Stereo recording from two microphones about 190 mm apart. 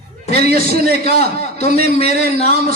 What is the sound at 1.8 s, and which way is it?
Speech, 35° left (ahead or behind).